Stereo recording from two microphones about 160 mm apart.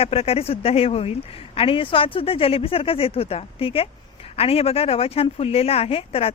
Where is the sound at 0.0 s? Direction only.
40° left (ahead or behind).